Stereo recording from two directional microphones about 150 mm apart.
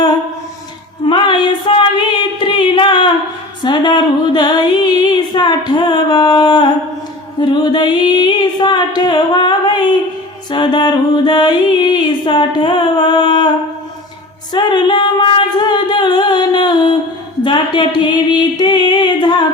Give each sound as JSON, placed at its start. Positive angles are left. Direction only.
{"t": 1.0, "sound": "music", "side_deg": 30}
{"t": 14.5, "sound": "music", "side_deg": 30}
{"t": 17.4, "sound": "a sound", "side_deg": 35}